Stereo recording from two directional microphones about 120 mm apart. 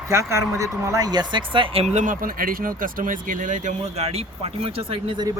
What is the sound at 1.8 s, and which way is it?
Speech, 85° right.